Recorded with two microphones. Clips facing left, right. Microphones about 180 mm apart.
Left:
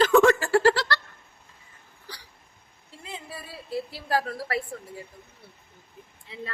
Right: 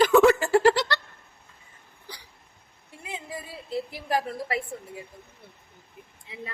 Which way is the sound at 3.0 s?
15° right (ahead or behind).